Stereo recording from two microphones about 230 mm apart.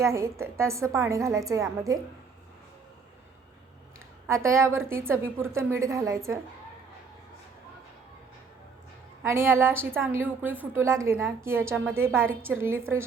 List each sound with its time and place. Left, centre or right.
0.0 s a woman's voice: centre
4.4 s a woman's voice: centre
9.2 s a woman's voice: centre